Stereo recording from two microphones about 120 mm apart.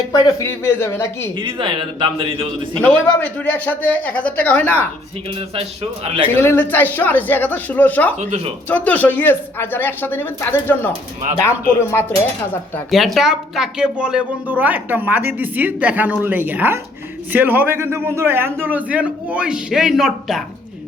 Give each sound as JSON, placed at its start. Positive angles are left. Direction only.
{"t": 0.1, "sound": "speech", "side_deg": 30}
{"t": 1.4, "sound": "a man's voice", "side_deg": -40}
{"t": 2.8, "sound": "speech", "side_deg": 10}
{"t": 6.4, "sound": "speech", "side_deg": 20}
{"t": 8.2, "sound": "speech", "side_deg": -70}
{"t": 8.7, "sound": "speech", "side_deg": 15}
{"t": 13.1, "sound": "a woman's voice", "side_deg": -5}